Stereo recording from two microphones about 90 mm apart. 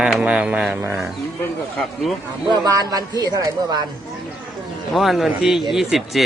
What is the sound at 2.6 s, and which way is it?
A man's voice, 45° right (ahead or behind).